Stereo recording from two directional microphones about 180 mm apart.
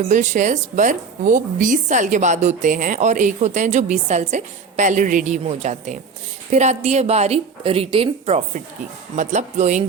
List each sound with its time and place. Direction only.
0.1 s a woman's voice: 40° right (ahead or behind)